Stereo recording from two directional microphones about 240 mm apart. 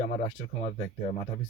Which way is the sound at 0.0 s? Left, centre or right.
Left.